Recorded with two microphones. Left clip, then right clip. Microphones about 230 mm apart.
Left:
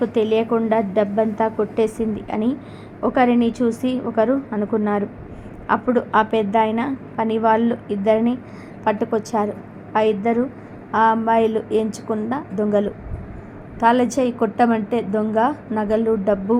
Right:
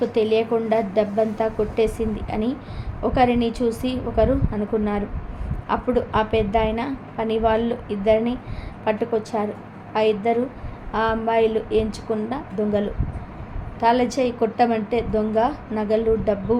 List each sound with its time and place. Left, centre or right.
0.0 s a woman's voice: centre